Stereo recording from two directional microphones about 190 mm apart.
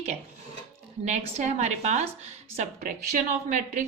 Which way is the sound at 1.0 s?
35° right (ahead or behind).